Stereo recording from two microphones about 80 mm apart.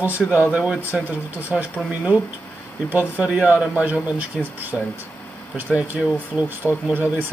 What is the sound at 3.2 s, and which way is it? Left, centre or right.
Speech, centre.